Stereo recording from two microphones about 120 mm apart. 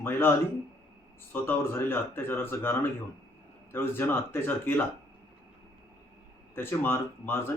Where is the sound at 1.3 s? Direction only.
20° left (ahead or behind).